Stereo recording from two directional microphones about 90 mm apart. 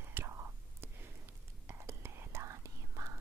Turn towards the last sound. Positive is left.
turn(degrees=-35)  # may be behind; listen again after turning